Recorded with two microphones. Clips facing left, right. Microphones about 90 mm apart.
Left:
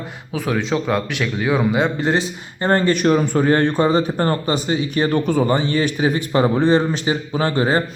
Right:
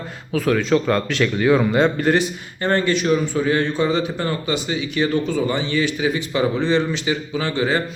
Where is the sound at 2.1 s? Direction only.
30° left (ahead or behind).